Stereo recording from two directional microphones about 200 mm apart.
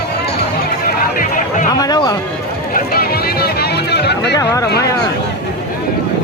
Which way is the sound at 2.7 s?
50° left (ahead or behind).